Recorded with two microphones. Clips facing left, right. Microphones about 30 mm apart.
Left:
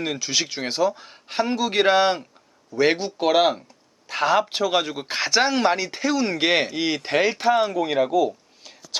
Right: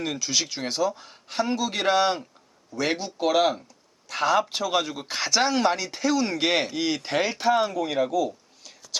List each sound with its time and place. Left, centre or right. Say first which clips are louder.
0.0 s speech: left 2 dB; centre